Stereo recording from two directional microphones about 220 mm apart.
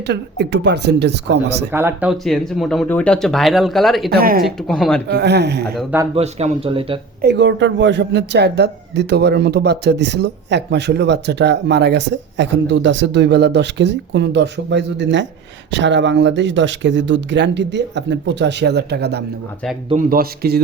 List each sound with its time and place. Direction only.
0.1 s speech: 50° right (ahead or behind)
1.7 s speech: 10° right (ahead or behind)
4.1 s speech: 40° right (ahead or behind)
4.4 s speech: centre (ahead or behind)
5.0 s speech: 50° right (ahead or behind)
5.7 s speech: 10° right (ahead or behind)
6.1 s speech: 30° right (ahead or behind)
7.2 s speech: 50° right (ahead or behind)